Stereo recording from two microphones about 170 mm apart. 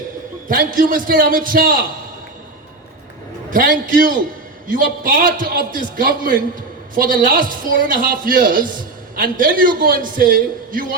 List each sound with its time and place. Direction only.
0.4 s a man's voice: 55° right (ahead or behind)
3.5 s a man's voice: 50° right (ahead or behind)